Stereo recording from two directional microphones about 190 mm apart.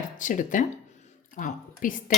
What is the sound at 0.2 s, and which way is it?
Speech, 40° left (ahead or behind).